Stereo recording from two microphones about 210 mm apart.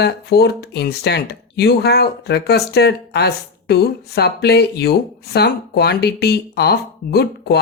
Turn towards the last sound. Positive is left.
turn(degrees=50)  # may be behind; listen again after turning